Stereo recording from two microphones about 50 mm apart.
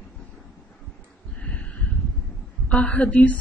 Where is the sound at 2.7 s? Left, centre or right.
Left.